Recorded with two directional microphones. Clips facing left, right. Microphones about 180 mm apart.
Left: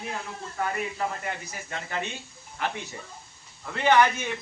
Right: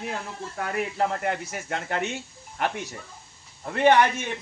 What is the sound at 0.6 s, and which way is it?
Speech, 65° right (ahead or behind).